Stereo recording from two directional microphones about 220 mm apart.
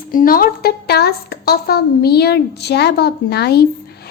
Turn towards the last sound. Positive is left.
turn(degrees=45)  # may be behind; listen again after turning